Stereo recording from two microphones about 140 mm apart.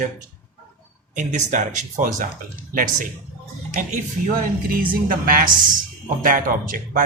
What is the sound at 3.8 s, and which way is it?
Speech, 65° right (ahead or behind).